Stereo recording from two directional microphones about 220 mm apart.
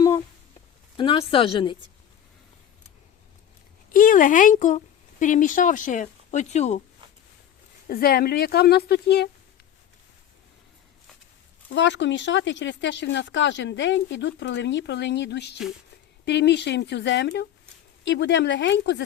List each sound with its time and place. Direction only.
0.9 s a woman's voice: 25° left (ahead or behind)
3.9 s speech: 40° left (ahead or behind)
7.9 s speech: 45° left (ahead or behind)
11.7 s speech: 55° left (ahead or behind)